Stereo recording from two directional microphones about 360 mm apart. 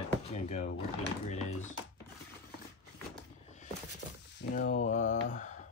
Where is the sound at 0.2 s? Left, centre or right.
Centre.